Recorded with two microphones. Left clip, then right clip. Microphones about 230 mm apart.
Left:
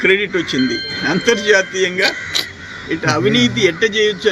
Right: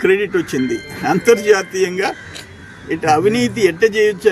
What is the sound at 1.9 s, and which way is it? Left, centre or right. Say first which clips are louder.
Speech: left 4 dB; centre.